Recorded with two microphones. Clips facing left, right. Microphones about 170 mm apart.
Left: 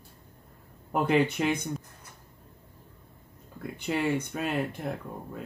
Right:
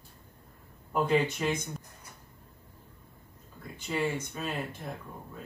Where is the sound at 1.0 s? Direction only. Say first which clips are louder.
Left 3 dB; 65° left (ahead or behind).